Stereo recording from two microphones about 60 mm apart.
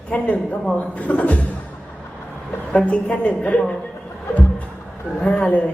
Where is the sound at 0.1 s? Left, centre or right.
Left.